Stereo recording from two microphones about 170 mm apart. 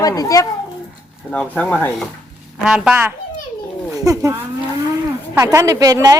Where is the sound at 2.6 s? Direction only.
5° right (ahead or behind).